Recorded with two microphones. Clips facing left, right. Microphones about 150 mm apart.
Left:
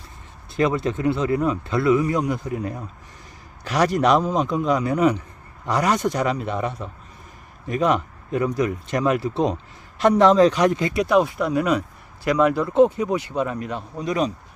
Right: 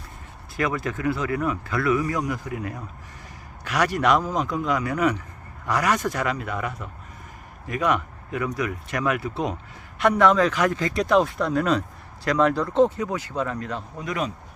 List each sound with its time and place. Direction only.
0.5 s a man's voice: 25° left (ahead or behind)
10.7 s speech: 15° left (ahead or behind)
10.9 s speech: 5° left (ahead or behind); by 14.3 s 25° left (ahead or behind)